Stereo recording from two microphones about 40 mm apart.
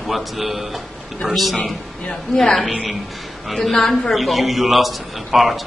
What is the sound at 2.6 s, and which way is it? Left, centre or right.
A man's voice, centre.